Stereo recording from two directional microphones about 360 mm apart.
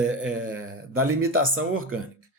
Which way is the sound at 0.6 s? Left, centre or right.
Right.